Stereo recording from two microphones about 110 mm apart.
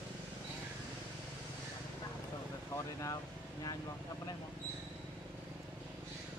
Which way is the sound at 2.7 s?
30° left (ahead or behind).